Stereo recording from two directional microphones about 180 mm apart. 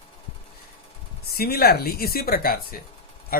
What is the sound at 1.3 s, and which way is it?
A man's voice, 60° left (ahead or behind).